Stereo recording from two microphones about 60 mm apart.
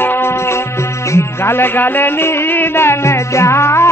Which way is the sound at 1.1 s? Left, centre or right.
Left.